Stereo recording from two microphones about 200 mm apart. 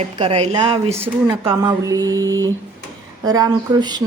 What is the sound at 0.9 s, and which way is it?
Speech, 15° right (ahead or behind).